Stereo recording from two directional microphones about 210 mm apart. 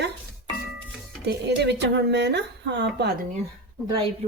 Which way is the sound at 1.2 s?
55° right (ahead or behind).